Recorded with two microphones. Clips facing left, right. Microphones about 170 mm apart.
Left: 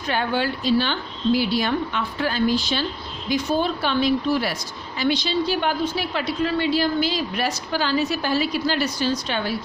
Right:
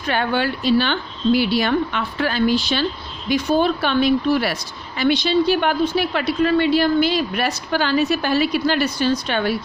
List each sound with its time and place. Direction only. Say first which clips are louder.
0.1 s a woman's voice: right 3 dB; 65° right (ahead or behind)